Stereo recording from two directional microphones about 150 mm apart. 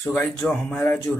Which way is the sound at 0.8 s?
15° left (ahead or behind).